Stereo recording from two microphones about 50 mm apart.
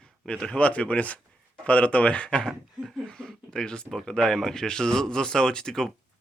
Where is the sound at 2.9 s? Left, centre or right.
Centre.